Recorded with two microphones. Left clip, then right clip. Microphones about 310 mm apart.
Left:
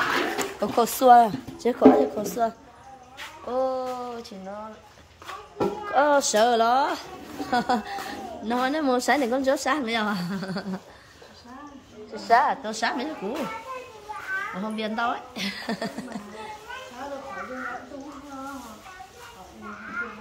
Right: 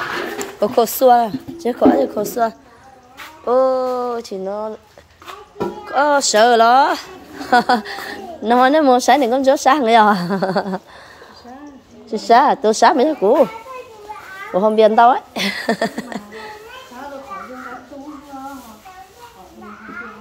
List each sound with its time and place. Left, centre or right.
0.6 s a woman's voice: centre
5.9 s a woman's voice: centre
12.1 s a woman's voice: right
14.6 s a woman's voice: centre